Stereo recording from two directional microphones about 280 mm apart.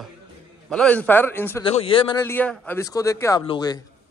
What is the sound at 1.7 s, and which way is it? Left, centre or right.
A man's voice, centre.